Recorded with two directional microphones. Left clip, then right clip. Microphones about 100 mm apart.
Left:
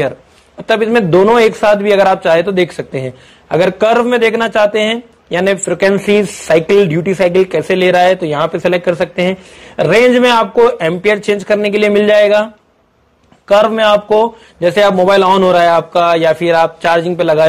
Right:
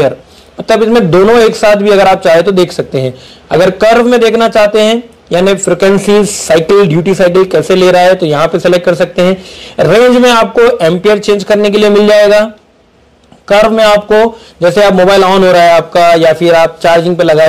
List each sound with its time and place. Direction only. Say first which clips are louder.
0.7 s a man's voice: right 4 dB; 5° left (ahead or behind)
5.4 s a man's voice: right 4 dB; 5° left (ahead or behind)
11.1 s speech: right 5 dB; 10° right (ahead or behind)
11.4 s a man's voice: right 4 dB; centre (ahead or behind)
13.5 s a man's voice: right 3 dB; 15° left (ahead or behind)
14.1 s a man's voice: right 4 dB; centre (ahead or behind)